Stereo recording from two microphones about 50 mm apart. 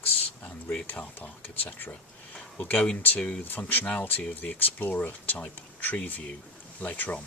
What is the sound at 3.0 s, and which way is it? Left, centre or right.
Speech, left.